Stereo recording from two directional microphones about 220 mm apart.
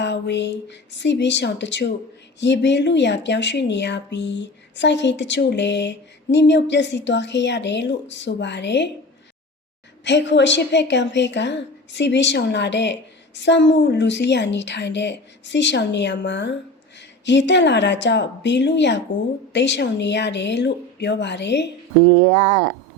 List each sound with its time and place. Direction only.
0.0 s a woman's voice: 50° left (ahead or behind)
10.0 s a woman's voice: 55° left (ahead or behind)